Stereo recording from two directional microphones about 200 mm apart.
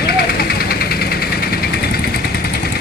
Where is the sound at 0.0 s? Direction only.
50° left (ahead or behind).